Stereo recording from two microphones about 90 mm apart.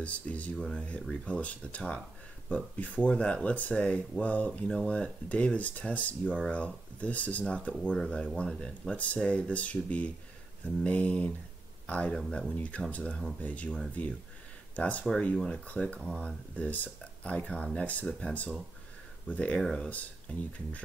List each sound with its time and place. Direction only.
0.0 s speech: 15° left (ahead or behind)